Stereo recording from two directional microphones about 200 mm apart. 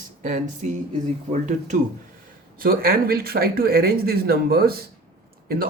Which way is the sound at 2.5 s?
45° right (ahead or behind).